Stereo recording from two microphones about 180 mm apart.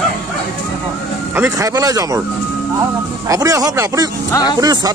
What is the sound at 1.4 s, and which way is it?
Speech, 20° right (ahead or behind).